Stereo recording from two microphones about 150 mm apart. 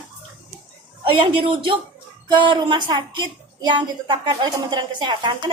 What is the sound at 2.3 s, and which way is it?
A woman's voice, 30° right (ahead or behind).